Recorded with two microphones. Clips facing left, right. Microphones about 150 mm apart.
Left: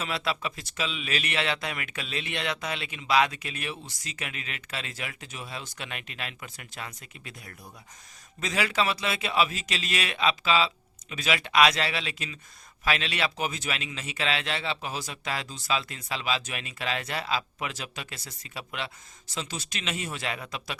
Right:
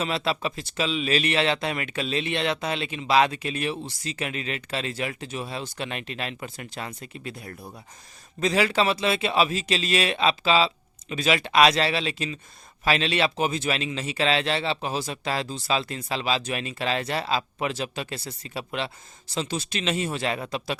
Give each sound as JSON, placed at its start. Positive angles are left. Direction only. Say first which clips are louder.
{"t": 0.0, "sound": "speech", "louder": "right 4 dB", "side_deg": -30}